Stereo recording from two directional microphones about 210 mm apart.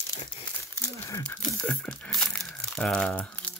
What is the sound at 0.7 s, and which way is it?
Speech, 15° left (ahead or behind).